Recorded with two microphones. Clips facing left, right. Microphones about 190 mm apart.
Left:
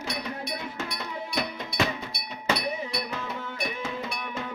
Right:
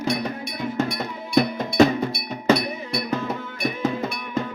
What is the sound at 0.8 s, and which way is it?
Music, 45° right (ahead or behind).